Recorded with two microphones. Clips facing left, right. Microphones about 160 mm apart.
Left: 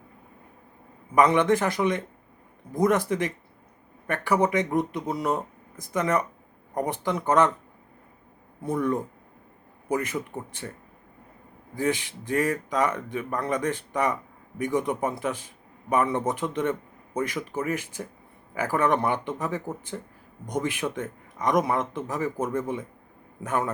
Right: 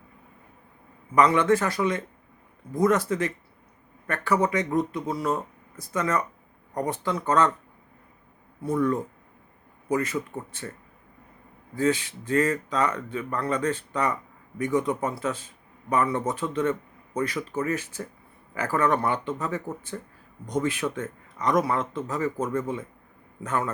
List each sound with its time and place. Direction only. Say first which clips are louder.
1.1 s speech: even; 20° left (ahead or behind)
8.7 s speech: right 1 dB; 15° left (ahead or behind)
11.8 s speech: right 2 dB; 15° left (ahead or behind)